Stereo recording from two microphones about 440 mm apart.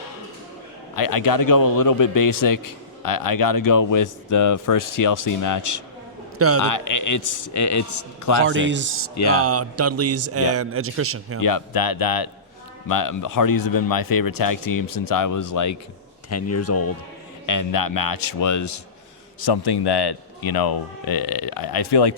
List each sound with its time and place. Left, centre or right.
0.9 s a man's voice: left
8.4 s a man's voice: right
11.3 s a man's voice: left
19.4 s a man's voice: left